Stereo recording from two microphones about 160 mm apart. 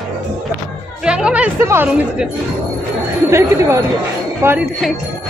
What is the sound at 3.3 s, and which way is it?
Speech, 15° right (ahead or behind).